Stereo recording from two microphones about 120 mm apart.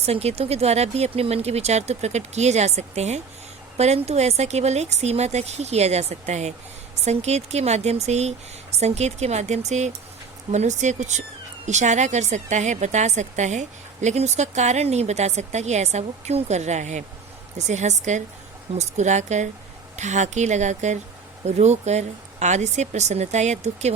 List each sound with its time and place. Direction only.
0.0 s a woman's voice: 60° right (ahead or behind)